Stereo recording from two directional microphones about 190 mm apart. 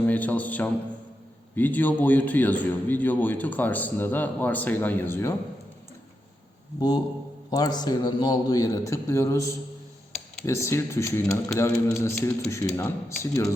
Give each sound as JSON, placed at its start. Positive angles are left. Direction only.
{"t": 0.0, "sound": "a man's voice", "side_deg": 10}
{"t": 6.7, "sound": "a man's voice", "side_deg": 20}